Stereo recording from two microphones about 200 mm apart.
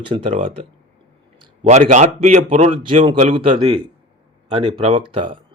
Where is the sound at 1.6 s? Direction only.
35° right (ahead or behind).